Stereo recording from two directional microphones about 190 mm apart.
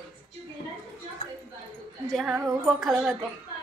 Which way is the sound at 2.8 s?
Centre (ahead or behind).